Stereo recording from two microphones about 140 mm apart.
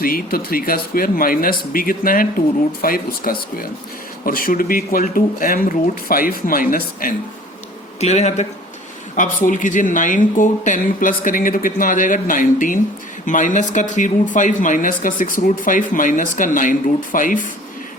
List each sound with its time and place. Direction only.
0.0 s speech: 90° left
7.9 s a man's voice: 50° left (ahead or behind)
9.1 s speech: 70° left (ahead or behind)